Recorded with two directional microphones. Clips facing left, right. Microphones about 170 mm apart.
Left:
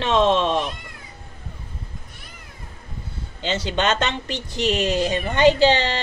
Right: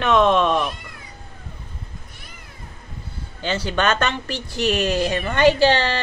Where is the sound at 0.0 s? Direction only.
25° left (ahead or behind).